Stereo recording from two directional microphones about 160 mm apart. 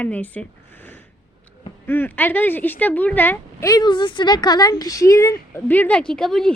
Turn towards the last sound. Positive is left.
turn(degrees=5)  # may be behind; listen again after turning